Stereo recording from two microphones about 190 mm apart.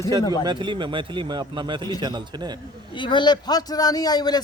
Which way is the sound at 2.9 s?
25° left (ahead or behind).